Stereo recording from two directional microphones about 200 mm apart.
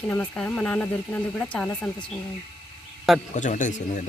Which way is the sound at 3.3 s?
40° left (ahead or behind).